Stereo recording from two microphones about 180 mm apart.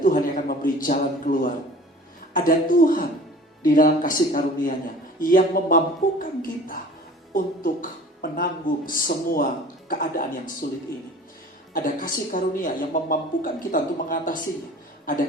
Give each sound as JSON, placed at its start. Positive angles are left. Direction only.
{"t": 0.0, "sound": "speech", "side_deg": 45}
{"t": 7.3, "sound": "speech", "side_deg": 50}
{"t": 11.7, "sound": "speech", "side_deg": 50}